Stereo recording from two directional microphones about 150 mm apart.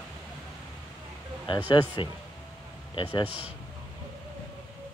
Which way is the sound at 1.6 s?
30° left (ahead or behind).